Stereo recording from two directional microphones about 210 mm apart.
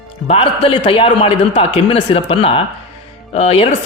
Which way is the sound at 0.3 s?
25° left (ahead or behind).